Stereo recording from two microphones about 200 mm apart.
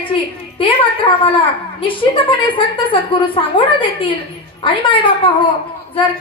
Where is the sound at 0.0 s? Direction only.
25° left (ahead or behind).